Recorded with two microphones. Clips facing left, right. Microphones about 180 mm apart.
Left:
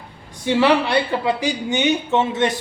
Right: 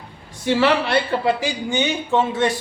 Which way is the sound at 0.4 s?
15° left (ahead or behind).